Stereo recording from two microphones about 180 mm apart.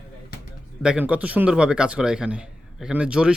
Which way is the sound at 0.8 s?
5° right (ahead or behind).